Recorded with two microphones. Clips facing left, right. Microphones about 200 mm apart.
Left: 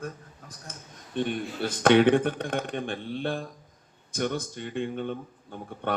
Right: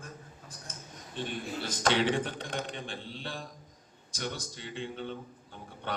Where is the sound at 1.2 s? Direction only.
60° left (ahead or behind).